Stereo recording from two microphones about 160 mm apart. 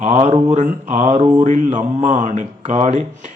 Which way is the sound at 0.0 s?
50° right (ahead or behind).